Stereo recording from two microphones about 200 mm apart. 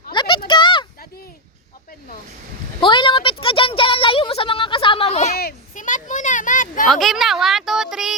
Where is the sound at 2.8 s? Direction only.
25° left (ahead or behind).